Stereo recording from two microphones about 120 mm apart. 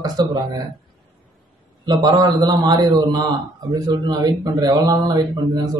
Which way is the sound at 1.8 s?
35° right (ahead or behind).